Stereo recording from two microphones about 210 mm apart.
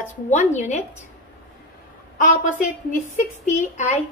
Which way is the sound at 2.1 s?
40° left (ahead or behind).